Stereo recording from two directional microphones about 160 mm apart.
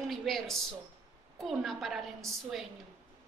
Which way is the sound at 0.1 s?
Centre (ahead or behind).